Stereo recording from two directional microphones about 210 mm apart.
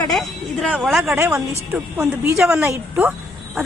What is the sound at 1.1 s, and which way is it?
Speech, 10° right (ahead or behind).